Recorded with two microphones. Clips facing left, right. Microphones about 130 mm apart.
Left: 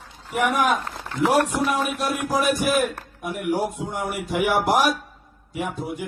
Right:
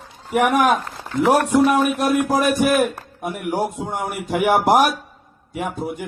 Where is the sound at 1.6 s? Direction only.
55° right (ahead or behind).